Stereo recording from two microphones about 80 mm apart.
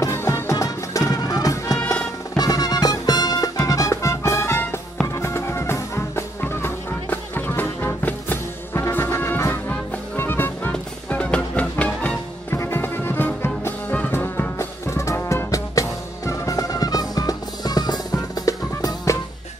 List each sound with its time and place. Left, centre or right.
0.0 s music: left
10.7 s music: centre
12.4 s music: left